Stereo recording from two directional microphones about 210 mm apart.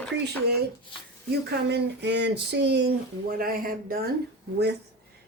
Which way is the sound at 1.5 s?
55° right (ahead or behind).